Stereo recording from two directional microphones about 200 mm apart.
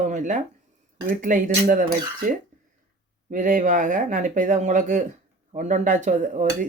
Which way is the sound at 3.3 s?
40° right (ahead or behind).